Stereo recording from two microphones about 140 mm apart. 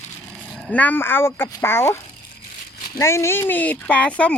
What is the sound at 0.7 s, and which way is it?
Speech, 10° left (ahead or behind).